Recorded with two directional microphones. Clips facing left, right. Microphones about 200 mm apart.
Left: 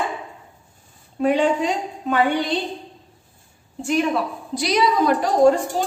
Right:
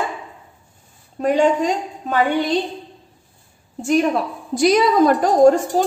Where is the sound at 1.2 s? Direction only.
40° right (ahead or behind).